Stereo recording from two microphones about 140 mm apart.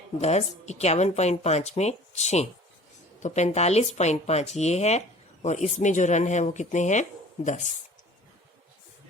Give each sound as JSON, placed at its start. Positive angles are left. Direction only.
{"t": 0.2, "sound": "speech", "side_deg": 50}